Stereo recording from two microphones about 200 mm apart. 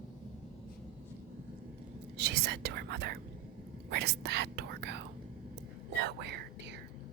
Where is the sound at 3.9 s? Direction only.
55° right (ahead or behind).